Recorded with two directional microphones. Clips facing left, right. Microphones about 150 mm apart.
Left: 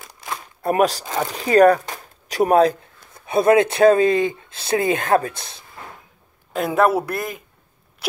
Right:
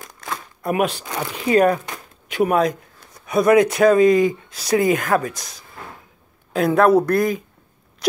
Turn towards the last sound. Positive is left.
turn(degrees=0)  # may be behind; listen again after turning